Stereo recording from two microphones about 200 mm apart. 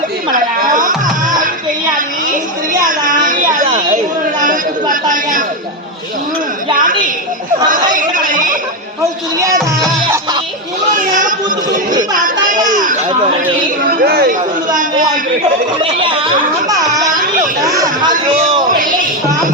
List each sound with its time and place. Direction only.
0.3 s music: 40° right (ahead or behind)
2.8 s chatter: 40° right (ahead or behind)
7.7 s chatter: 40° right (ahead or behind)
10.9 s a sound: 40° right (ahead or behind)
14.0 s speech: 50° right (ahead or behind)
15.8 s speech: 25° right (ahead or behind)